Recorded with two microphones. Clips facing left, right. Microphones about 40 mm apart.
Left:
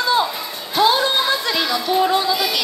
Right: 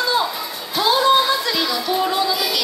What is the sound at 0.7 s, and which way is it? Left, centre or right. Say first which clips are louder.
Music: right 1 dB; left.